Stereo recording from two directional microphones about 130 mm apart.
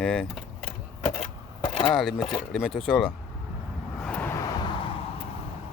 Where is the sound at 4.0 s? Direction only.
10° left (ahead or behind).